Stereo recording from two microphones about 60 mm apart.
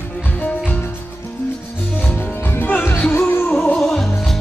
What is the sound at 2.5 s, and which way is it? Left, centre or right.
Music, left.